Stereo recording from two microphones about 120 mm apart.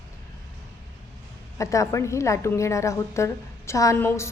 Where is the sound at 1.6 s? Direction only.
25° left (ahead or behind).